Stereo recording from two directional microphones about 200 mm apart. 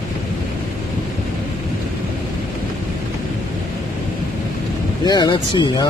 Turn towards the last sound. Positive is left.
turn(degrees=20)  # may be behind; listen again after turning